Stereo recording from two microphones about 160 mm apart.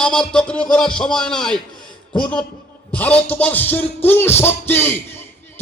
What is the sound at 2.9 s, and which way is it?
Speech, 10° left (ahead or behind).